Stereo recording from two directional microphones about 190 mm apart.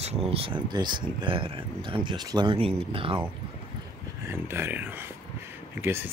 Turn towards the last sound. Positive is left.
turn(degrees=-10)  # may be behind; listen again after turning